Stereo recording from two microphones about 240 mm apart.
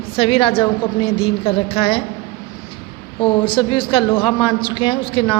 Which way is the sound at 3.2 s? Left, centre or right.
Left.